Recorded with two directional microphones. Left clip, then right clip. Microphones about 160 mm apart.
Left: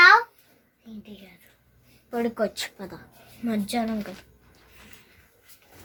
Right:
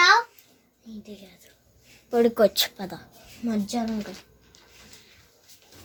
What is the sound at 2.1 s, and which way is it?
Speech, 90° right.